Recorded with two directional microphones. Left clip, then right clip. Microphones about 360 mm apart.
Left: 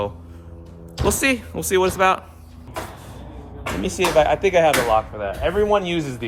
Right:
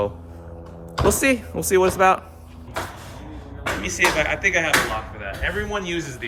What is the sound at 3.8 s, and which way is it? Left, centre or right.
Speech, centre.